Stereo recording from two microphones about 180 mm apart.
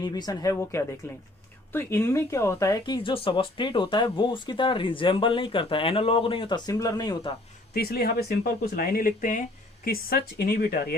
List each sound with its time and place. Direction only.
0.0 s speech: 20° left (ahead or behind)
7.7 s speech: 60° left (ahead or behind)